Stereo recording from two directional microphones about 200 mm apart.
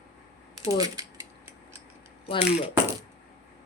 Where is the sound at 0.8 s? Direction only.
20° right (ahead or behind).